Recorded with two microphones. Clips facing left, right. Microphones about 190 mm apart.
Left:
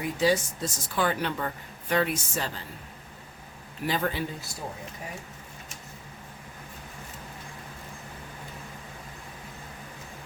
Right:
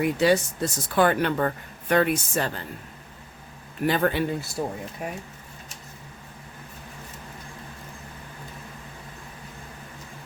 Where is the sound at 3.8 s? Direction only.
60° right (ahead or behind).